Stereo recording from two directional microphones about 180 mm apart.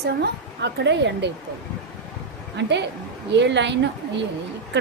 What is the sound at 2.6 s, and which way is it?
A woman's voice, 75° right (ahead or behind).